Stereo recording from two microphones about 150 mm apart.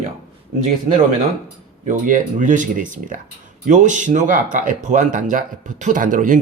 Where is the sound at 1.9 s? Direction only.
60° right (ahead or behind).